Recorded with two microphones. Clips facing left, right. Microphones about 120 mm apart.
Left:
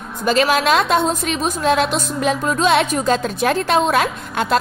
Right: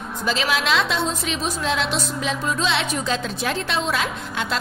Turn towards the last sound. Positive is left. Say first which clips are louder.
# left 7 dB
turn(degrees=50)  # may be behind; listen again after turning